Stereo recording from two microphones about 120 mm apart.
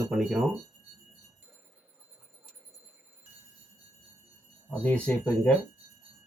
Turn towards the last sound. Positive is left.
turn(degrees=10)  # may be behind; listen again after turning